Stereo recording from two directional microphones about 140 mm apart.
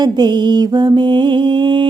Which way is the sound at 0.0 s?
30° right (ahead or behind).